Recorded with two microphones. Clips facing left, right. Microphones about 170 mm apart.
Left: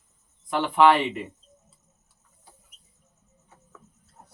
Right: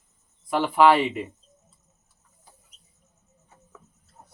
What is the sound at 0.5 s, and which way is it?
Speech, 5° right (ahead or behind).